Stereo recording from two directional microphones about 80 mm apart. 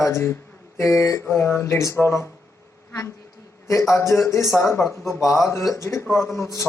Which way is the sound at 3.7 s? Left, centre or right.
Left.